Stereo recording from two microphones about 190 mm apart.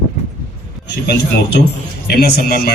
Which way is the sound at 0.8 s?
65° left (ahead or behind).